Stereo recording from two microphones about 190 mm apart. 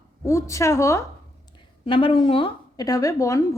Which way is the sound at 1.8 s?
30° left (ahead or behind).